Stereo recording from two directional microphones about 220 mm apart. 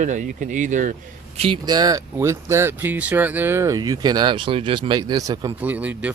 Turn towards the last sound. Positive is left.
turn(degrees=-5)  # may be behind; listen again after turning